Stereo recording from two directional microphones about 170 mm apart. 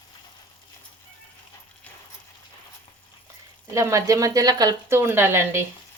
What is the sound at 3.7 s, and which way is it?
Speech, 15° right (ahead or behind).